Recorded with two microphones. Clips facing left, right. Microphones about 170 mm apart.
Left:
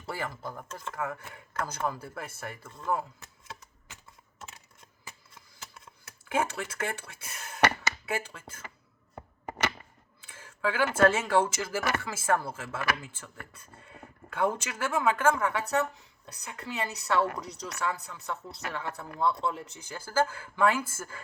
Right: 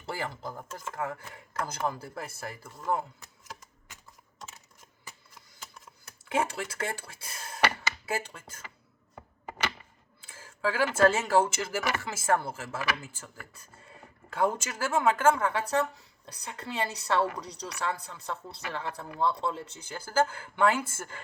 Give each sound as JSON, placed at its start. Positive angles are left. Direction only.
{"t": 0.0, "sound": "speech", "side_deg": -30}
{"t": 6.2, "sound": "speech", "side_deg": -30}
{"t": 10.2, "sound": "a sound", "side_deg": -30}
{"t": 10.9, "sound": "speech", "side_deg": -25}
{"t": 13.8, "sound": "a sound", "side_deg": -30}
{"t": 14.5, "sound": "speech", "side_deg": -30}